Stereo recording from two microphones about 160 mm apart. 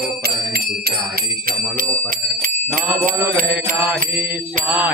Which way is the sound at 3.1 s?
60° right (ahead or behind).